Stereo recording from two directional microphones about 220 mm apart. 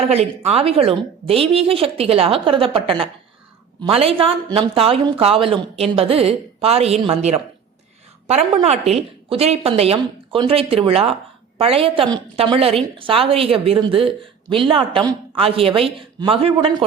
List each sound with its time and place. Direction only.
0.1 s a woman's voice: 30° right (ahead or behind)
8.6 s a woman's voice: 30° right (ahead or behind)